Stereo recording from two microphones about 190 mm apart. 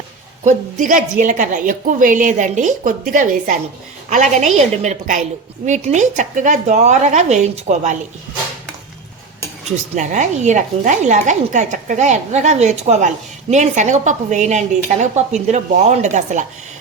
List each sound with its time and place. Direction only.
0.4 s speech: 40° right (ahead or behind)
9.9 s speech: 40° right (ahead or behind)